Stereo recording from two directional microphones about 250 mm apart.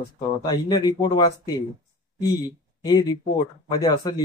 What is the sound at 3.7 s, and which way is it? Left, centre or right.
Speech, centre.